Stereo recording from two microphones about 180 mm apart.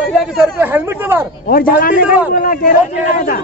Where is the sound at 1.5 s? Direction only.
55° left (ahead or behind).